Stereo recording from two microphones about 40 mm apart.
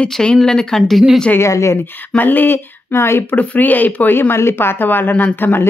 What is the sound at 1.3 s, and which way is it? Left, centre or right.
Speech, left.